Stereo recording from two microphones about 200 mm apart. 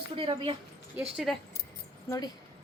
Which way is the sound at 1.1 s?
Centre (ahead or behind).